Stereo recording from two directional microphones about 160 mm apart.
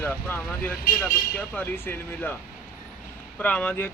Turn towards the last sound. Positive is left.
turn(degrees=10)  # may be behind; listen again after turning